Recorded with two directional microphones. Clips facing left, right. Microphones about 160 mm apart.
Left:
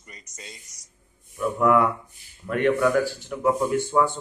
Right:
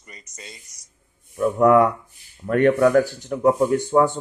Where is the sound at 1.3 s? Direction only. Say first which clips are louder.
Right 5 dB; 40° right (ahead or behind).